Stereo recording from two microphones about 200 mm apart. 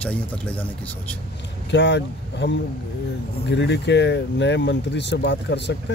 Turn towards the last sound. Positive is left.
turn(degrees=60)  # may be behind; listen again after turning